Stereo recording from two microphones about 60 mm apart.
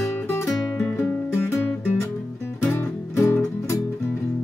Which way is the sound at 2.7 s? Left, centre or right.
Left.